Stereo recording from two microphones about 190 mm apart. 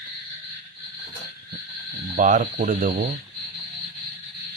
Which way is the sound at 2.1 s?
45° right (ahead or behind).